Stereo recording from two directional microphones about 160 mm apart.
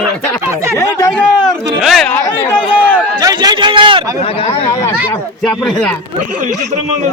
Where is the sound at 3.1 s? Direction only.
25° right (ahead or behind).